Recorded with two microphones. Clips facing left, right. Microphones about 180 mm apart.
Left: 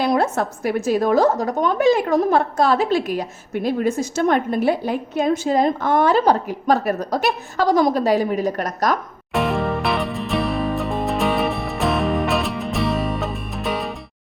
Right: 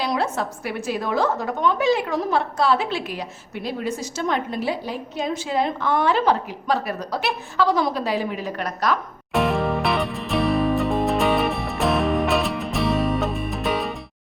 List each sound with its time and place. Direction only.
0.0 s a woman's voice: 50° left (ahead or behind)
9.3 s music: centre (ahead or behind)